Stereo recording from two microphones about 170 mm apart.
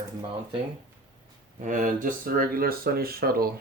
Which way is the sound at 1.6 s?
50° right (ahead or behind).